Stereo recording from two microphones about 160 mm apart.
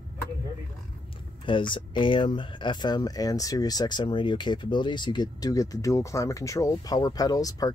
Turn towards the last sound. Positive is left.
turn(degrees=20)  # may be behind; listen again after turning